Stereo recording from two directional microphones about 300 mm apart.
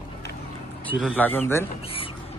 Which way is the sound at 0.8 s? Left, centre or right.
Centre.